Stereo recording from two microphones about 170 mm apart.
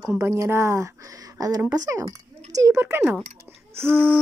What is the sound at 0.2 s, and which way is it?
A child's voice, 15° right (ahead or behind).